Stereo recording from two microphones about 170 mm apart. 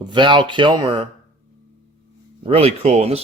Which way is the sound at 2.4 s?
35° right (ahead or behind).